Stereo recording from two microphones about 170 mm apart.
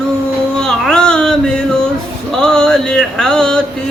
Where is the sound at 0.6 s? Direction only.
5° left (ahead or behind).